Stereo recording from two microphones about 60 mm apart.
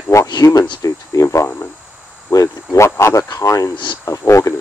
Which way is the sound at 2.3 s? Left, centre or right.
Left.